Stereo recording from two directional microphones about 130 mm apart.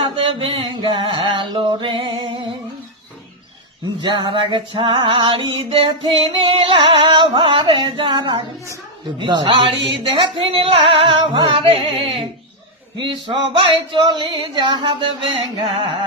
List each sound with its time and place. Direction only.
0.0 s a sound: 45° right (ahead or behind)
4.0 s female singing: 35° right (ahead or behind)
9.2 s music: 35° right (ahead or behind)
13.0 s female singing: 35° right (ahead or behind)